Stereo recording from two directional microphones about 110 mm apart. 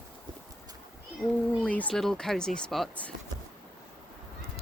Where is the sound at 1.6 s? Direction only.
10° left (ahead or behind).